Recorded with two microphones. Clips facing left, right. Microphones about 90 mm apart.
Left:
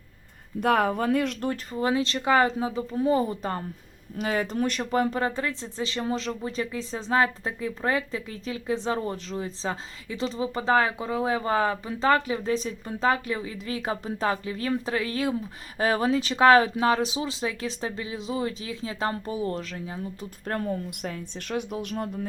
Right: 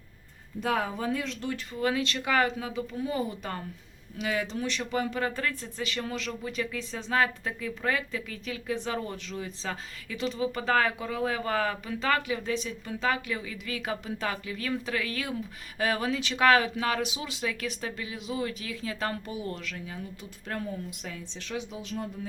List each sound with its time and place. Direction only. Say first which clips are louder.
0.6 s speech: left 6 dB; 60° left (ahead or behind)
1.5 s speech: left 3 dB; 30° left (ahead or behind)
5.4 s speech: left 3 dB; 25° left (ahead or behind)
20.5 s speech: left 5 dB; 55° left (ahead or behind)